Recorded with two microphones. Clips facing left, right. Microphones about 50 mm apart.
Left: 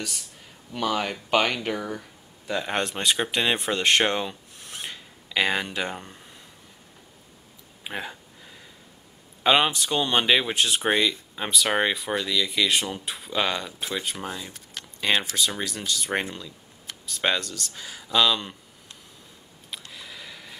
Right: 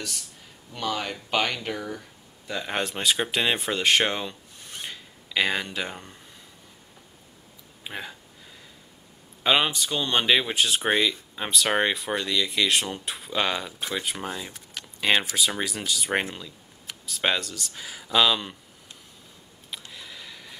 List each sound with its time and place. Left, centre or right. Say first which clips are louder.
0.7 s speech: left 3 dB; centre
7.8 s speech: left 3 dB; centre
9.4 s speech: left 2 dB; centre
19.7 s a sound: even; centre